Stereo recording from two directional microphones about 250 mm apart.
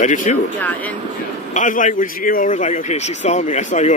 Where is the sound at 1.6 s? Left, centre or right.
Left.